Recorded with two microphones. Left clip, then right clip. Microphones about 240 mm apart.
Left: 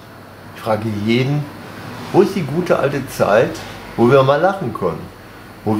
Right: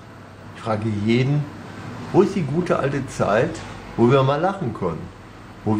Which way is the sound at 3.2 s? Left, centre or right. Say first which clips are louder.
Left 6 dB; centre.